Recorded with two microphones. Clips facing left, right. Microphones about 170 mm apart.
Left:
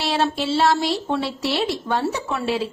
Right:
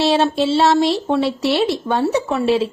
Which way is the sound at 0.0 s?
25° right (ahead or behind).